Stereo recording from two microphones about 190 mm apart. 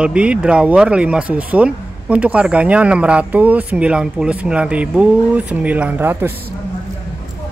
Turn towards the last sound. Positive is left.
turn(degrees=-10)  # may be behind; listen again after turning